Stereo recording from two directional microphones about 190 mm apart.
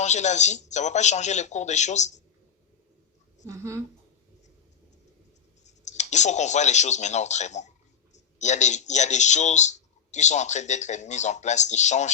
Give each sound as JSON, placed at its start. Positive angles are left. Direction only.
{"t": 0.0, "sound": "speech", "side_deg": 40}
{"t": 3.4, "sound": "a woman's voice", "side_deg": -15}
{"t": 5.6, "sound": "speech", "side_deg": 40}